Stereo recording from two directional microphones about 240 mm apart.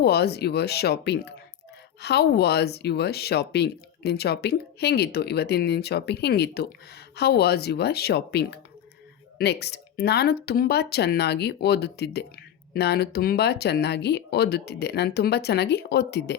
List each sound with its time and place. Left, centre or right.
0.0 s speech: left